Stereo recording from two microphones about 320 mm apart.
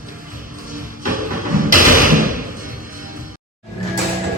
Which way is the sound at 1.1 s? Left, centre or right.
Right.